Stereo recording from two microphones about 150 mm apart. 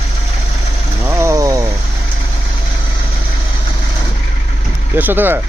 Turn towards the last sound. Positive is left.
turn(degrees=-15)  # may be behind; listen again after turning